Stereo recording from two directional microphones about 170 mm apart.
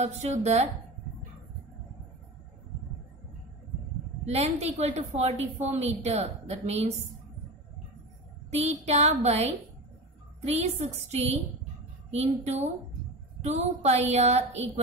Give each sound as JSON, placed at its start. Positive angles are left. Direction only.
{"t": 0.0, "sound": "a woman's voice", "side_deg": -40}
{"t": 4.3, "sound": "a woman's voice", "side_deg": -40}
{"t": 8.5, "sound": "a woman's voice", "side_deg": -40}